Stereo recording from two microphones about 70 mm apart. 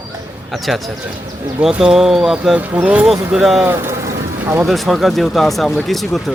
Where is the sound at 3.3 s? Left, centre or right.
Centre.